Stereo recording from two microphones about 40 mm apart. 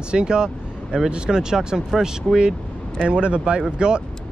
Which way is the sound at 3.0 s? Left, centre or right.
Right.